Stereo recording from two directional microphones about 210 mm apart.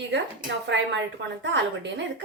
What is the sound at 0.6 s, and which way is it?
Speech, 60° right (ahead or behind).